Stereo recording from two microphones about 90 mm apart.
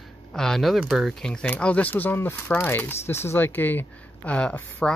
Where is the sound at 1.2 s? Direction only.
10° left (ahead or behind).